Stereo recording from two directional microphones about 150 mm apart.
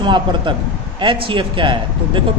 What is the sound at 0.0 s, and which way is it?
Speech, 30° right (ahead or behind).